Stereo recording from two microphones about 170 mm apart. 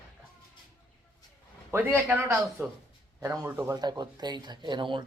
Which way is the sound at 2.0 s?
10° right (ahead or behind).